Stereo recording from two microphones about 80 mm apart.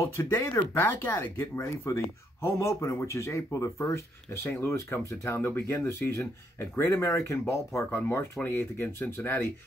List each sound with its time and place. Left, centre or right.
0.0 s speech: left